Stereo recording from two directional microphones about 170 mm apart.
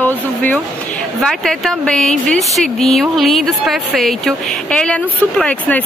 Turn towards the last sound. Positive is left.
turn(degrees=5)  # may be behind; listen again after turning